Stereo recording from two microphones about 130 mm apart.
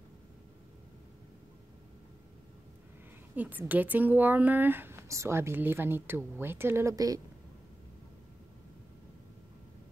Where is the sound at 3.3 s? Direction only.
15° right (ahead or behind).